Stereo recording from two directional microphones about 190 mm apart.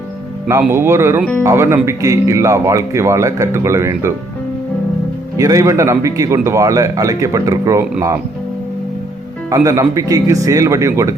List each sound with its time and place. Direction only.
0.7 s speech: 15° right (ahead or behind)
5.4 s speech: 15° right (ahead or behind)
9.5 s speech: 15° right (ahead or behind)